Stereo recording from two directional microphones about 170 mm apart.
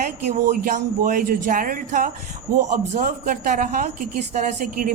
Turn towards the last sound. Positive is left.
turn(degrees=-50)  # may be behind; listen again after turning